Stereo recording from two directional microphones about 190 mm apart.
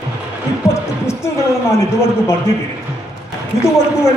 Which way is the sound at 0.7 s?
15° left (ahead or behind).